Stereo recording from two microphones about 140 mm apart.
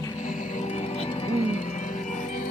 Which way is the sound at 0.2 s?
75° left (ahead or behind).